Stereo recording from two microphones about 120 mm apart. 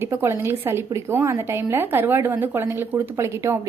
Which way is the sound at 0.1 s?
20° right (ahead or behind).